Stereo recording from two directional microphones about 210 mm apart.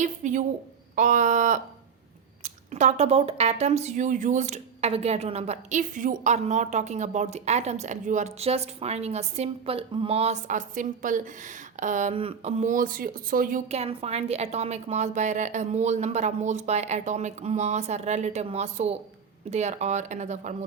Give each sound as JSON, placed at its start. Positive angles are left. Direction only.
{"t": 0.0, "sound": "speech", "side_deg": -35}
{"t": 13.7, "sound": "speech", "side_deg": -30}